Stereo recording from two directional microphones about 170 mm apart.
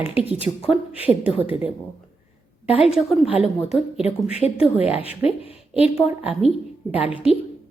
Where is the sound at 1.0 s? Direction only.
10° right (ahead or behind).